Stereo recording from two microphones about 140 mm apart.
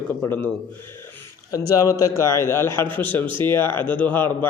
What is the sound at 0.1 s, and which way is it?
Mantra, 15° left (ahead or behind).